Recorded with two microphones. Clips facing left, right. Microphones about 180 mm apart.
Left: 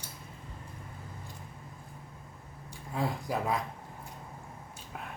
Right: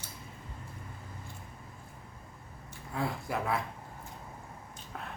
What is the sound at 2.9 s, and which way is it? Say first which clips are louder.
Speech: left 2 dB; 15° left (ahead or behind).